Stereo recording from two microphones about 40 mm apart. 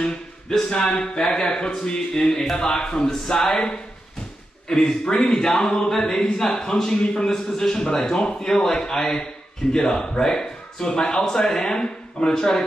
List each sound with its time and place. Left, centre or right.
0.0 s a man's voice: centre
4.6 s a man's voice: centre